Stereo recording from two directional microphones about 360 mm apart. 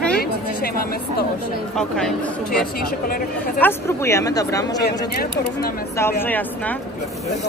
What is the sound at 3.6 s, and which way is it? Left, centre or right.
Speech, centre.